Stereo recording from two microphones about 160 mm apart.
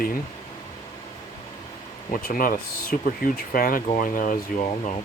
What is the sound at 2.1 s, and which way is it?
Speech, 60° left (ahead or behind).